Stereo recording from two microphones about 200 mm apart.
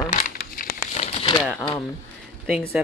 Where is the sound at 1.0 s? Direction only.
25° left (ahead or behind).